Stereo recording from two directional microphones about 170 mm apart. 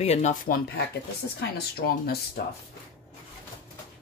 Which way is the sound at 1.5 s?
65° left (ahead or behind).